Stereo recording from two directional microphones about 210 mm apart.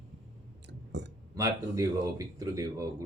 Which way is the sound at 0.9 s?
55° right (ahead or behind).